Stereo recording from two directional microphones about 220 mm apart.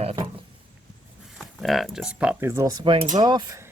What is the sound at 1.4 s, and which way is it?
Speech, centre (ahead or behind).